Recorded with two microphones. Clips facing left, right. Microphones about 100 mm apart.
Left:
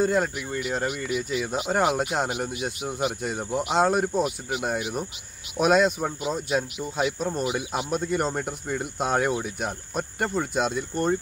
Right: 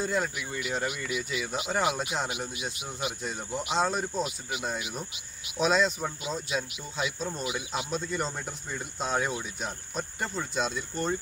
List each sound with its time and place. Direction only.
0.0 s speech: 50° left (ahead or behind)
3.0 s speech: 55° left (ahead or behind)